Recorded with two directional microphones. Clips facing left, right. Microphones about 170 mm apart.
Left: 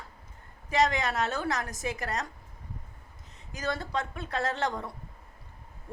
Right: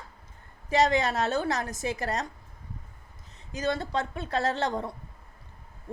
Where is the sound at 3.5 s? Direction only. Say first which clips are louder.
Right 3 dB; 20° right (ahead or behind).